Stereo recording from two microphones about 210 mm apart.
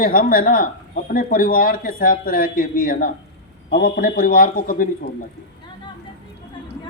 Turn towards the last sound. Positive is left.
turn(degrees=40)  # may be behind; listen again after turning